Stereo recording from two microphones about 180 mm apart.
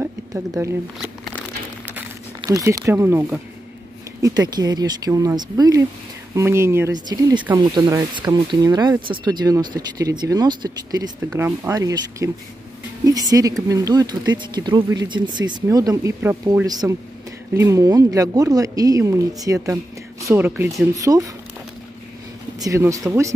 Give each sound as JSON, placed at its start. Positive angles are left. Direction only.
{"t": 0.0, "sound": "a sound", "side_deg": -15}
{"t": 0.9, "sound": "shuffling cards", "side_deg": 0}
{"t": 2.4, "sound": "speech", "side_deg": -15}
{"t": 22.6, "sound": "speech", "side_deg": -15}